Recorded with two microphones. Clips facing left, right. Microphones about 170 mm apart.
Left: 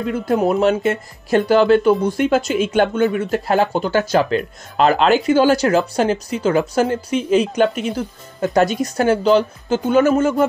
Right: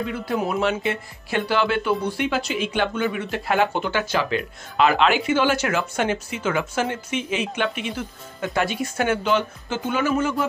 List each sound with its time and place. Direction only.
0.3 s speech: 40° left (ahead or behind)